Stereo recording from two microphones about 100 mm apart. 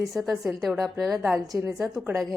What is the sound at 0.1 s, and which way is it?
A woman's voice, centre (ahead or behind).